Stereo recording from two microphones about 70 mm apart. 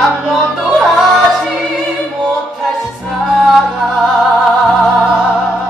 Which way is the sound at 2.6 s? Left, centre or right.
Centre.